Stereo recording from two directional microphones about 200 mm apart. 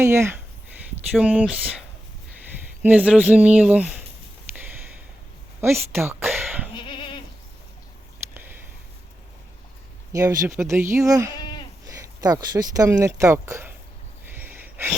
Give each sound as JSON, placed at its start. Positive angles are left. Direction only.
{"t": 0.0, "sound": "speech", "side_deg": -15}
{"t": 2.8, "sound": "speech", "side_deg": -5}
{"t": 5.5, "sound": "a sound", "side_deg": -10}
{"t": 6.7, "sound": "goat", "side_deg": 25}
{"t": 10.1, "sound": "speech", "side_deg": -15}
{"t": 11.3, "sound": "goat", "side_deg": 20}
{"t": 11.9, "sound": "speech", "side_deg": -15}
{"t": 14.3, "sound": "a sound", "side_deg": -10}